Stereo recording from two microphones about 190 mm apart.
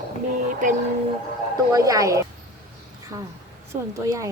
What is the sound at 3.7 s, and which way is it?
Speech, 15° right (ahead or behind).